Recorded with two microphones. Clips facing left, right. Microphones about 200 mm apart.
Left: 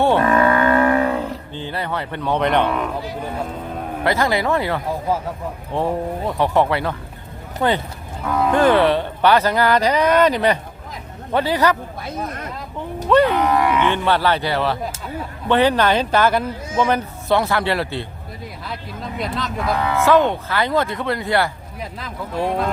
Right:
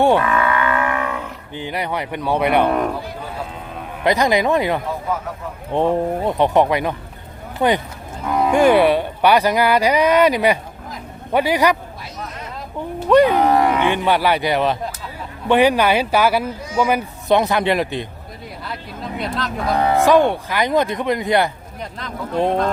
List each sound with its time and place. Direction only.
0.2 s livestock: 40° left (ahead or behind)
1.5 s a man's voice: 15° right (ahead or behind)
4.0 s a man's voice: 15° right (ahead or behind)
13.1 s speech: 15° right (ahead or behind)
13.3 s a sound: 35° right (ahead or behind)
13.8 s a man's voice: 15° right (ahead or behind)
18.6 s speech: centre (ahead or behind)
19.7 s speech: 40° right (ahead or behind)
20.1 s a man's voice: 10° right (ahead or behind)
21.8 s speech: 5° left (ahead or behind)